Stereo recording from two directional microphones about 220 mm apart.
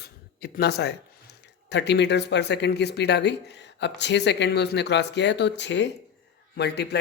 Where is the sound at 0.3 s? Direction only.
50° left (ahead or behind).